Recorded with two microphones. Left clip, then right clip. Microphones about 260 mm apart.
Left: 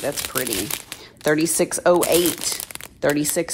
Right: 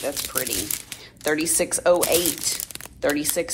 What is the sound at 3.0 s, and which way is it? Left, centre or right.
Speech, left.